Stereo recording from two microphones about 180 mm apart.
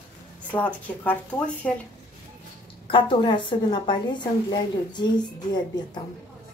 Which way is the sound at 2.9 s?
30° left (ahead or behind).